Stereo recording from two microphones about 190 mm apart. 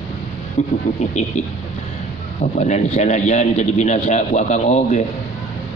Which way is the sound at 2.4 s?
35° left (ahead or behind).